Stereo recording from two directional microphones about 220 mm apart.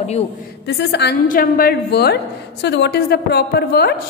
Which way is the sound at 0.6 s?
50° left (ahead or behind).